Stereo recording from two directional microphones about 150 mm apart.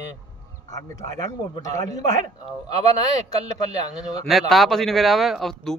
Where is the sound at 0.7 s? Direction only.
25° left (ahead or behind).